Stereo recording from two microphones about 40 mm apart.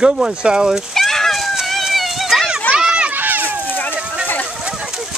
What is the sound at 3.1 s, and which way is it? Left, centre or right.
Run, right.